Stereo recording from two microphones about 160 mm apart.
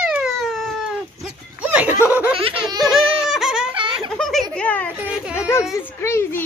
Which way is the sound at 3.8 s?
35° right (ahead or behind).